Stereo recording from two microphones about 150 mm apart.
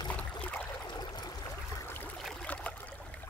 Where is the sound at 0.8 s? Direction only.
25° left (ahead or behind).